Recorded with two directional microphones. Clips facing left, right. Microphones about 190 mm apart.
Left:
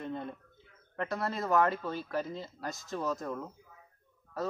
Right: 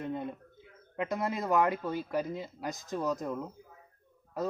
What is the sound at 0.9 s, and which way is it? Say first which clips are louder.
Speech: right 2 dB; 15° right (ahead or behind).